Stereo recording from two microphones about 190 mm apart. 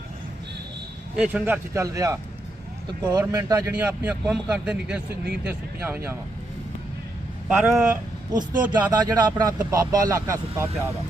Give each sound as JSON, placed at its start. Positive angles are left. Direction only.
{"t": 1.1, "sound": "a man's voice", "side_deg": -5}
{"t": 3.8, "sound": "speech", "side_deg": -5}
{"t": 7.4, "sound": "speech", "side_deg": -5}
{"t": 8.7, "sound": "a man's voice", "side_deg": -20}